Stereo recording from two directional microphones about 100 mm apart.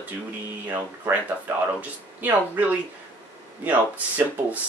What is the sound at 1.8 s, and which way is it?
Speech, 20° right (ahead or behind).